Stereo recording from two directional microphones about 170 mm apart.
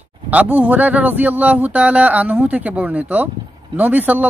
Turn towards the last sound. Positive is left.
turn(degrees=-10)  # may be behind; listen again after turning